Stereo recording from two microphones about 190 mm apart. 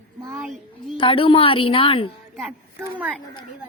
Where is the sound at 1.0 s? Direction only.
30° left (ahead or behind).